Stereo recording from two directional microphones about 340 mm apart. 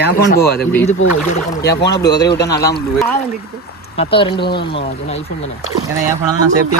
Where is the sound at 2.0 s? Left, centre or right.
Centre.